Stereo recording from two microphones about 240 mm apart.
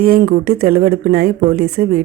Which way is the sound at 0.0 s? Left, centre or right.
Right.